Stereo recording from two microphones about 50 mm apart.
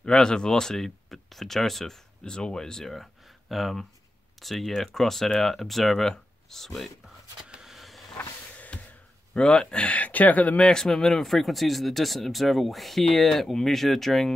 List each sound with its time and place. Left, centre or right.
0.0 s speech: centre
2.2 s speech: centre
7.6 s vehicle: centre
8.7 s a sound: left
9.3 s speech: centre
10.7 s speech: centre